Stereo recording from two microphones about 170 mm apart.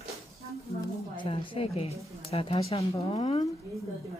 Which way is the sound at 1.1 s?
30° left (ahead or behind).